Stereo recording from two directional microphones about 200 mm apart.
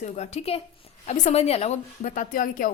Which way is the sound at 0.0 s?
35° left (ahead or behind).